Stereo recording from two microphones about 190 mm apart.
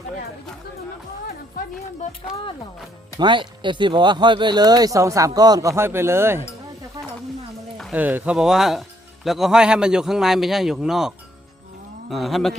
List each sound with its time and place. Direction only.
3.2 s speech: 25° right (ahead or behind)
7.8 s a man's voice: 5° right (ahead or behind)
12.1 s a man's voice: centre (ahead or behind)